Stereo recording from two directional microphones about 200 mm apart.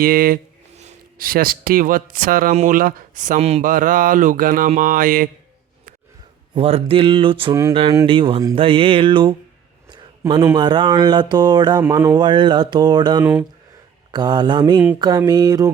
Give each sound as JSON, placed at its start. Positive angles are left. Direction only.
{"t": 0.0, "sound": "speech", "side_deg": -45}
{"t": 6.5, "sound": "speech", "side_deg": -30}